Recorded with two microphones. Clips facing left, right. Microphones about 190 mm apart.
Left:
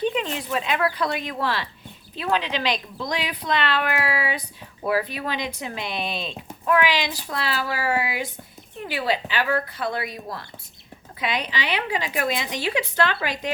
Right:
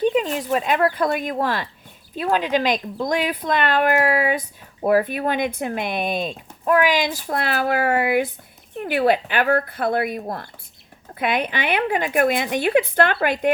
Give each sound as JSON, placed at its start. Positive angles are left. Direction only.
{"t": 0.0, "sound": "speech", "side_deg": -45}